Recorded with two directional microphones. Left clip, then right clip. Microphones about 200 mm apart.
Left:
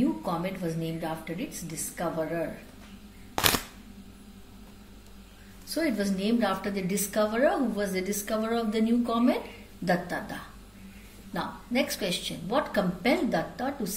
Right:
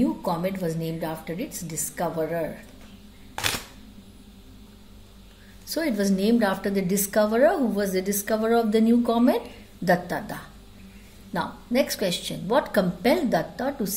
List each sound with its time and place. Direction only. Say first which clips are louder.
0.2 s a woman's voice: right 5 dB; 50° right (ahead or behind)
5.7 s a woman's voice: right 3 dB; 50° right (ahead or behind)